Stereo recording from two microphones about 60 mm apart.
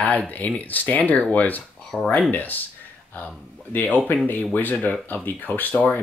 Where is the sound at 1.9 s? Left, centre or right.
Centre.